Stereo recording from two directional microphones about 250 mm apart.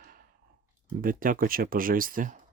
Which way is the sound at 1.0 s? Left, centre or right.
Right.